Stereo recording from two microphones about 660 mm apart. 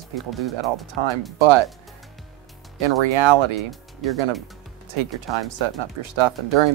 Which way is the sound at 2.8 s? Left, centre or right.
Right.